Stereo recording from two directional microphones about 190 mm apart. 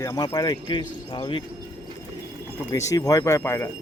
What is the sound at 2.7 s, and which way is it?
Speech, 20° left (ahead or behind).